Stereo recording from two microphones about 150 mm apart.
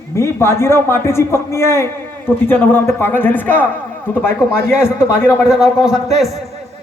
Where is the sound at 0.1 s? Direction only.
15° left (ahead or behind).